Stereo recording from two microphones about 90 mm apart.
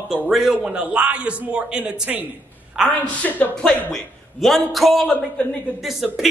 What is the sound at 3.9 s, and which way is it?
A man's voice, 5° left (ahead or behind).